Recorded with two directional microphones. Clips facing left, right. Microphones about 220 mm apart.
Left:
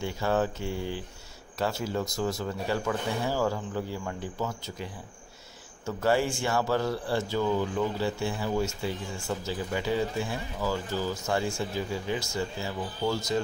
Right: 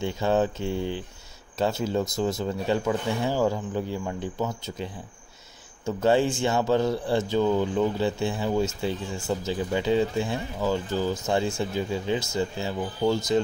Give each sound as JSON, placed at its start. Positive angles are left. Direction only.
{"t": 0.0, "sound": "speech", "side_deg": -20}
{"t": 5.9, "sound": "speech", "side_deg": -20}